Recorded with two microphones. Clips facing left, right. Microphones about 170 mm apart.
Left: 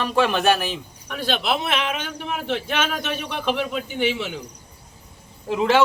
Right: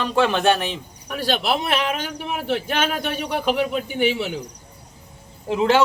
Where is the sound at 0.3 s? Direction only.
5° left (ahead or behind).